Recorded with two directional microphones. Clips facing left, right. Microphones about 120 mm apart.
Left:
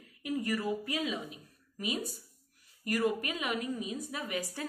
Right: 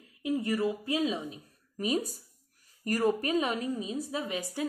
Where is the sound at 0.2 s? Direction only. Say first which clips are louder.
Right 4 dB; 25° right (ahead or behind).